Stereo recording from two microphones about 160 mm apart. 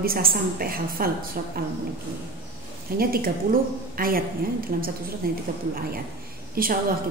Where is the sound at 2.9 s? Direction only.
65° right (ahead or behind).